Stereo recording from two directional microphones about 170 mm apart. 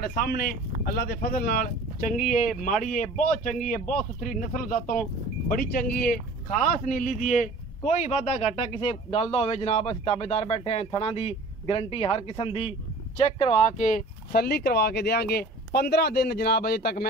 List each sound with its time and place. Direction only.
0.0 s a man's voice: 65° left (ahead or behind)
5.5 s speech: 60° left (ahead or behind)